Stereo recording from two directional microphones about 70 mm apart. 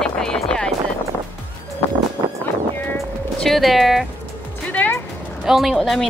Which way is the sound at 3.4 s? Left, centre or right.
Centre.